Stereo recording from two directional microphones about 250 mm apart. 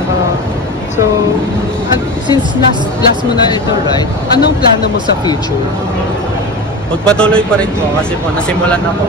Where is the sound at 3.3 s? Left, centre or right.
Centre.